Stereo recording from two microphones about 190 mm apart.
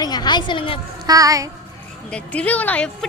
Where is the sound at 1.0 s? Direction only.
20° right (ahead or behind).